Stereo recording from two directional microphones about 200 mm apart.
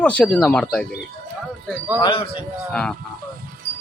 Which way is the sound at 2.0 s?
25° left (ahead or behind).